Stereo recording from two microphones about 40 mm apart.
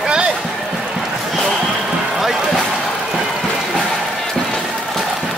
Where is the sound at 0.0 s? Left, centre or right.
Centre.